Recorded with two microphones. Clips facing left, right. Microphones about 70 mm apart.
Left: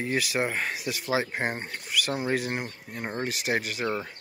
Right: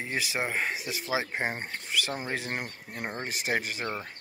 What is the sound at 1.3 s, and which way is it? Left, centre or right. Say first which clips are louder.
Speech: left 1 dB; centre.